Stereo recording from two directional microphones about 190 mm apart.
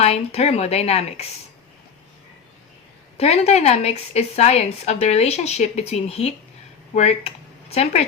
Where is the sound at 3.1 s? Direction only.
35° left (ahead or behind).